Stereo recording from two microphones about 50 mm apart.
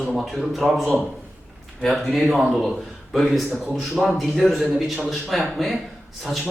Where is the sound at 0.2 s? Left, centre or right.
Centre.